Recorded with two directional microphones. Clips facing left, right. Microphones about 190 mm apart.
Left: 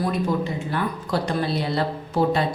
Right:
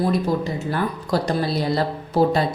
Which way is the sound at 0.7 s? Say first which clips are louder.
Right 5 dB; 40° right (ahead or behind).